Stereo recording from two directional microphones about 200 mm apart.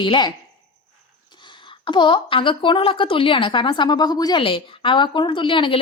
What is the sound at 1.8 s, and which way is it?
A woman's voice, 25° left (ahead or behind).